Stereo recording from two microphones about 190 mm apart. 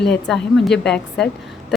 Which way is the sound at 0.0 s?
5° left (ahead or behind).